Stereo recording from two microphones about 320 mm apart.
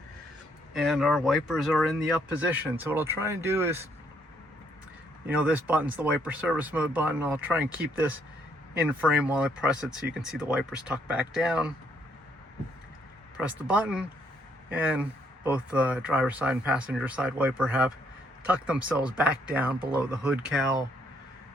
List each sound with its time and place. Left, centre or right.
0.7 s speech: centre
5.2 s speech: centre
13.3 s speech: centre